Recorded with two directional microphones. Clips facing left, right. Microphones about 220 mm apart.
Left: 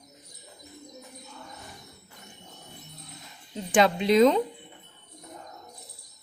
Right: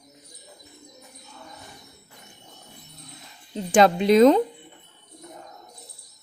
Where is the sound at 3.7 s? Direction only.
40° right (ahead or behind).